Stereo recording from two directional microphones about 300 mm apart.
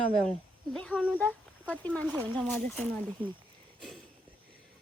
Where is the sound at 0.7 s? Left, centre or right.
Centre.